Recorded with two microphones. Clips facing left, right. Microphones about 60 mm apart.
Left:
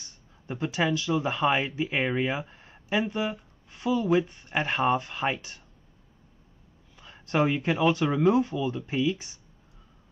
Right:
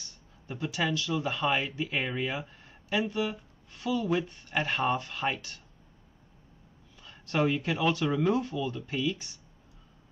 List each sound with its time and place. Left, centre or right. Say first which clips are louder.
0.5 s speech: left 4 dB; centre
7.0 s a sound: left 3 dB; centre
7.9 s speech: left 4 dB; centre